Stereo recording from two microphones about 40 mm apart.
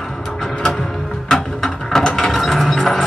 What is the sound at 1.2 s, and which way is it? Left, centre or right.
Music, centre.